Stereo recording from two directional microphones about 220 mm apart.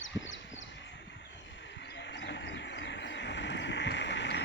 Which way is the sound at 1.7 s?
55° left (ahead or behind).